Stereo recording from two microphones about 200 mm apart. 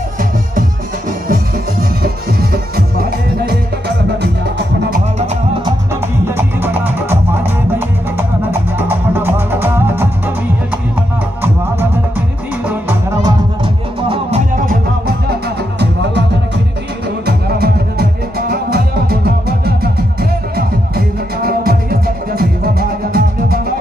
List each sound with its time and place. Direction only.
2.5 s music: 50° right (ahead or behind)
6.2 s music: 10° right (ahead or behind)
8.2 s music: 10° right (ahead or behind)
12.6 s music: 10° right (ahead or behind)
14.0 s music: 25° right (ahead or behind)
14.7 s music: 50° right (ahead or behind)
17.3 s music: 50° right (ahead or behind)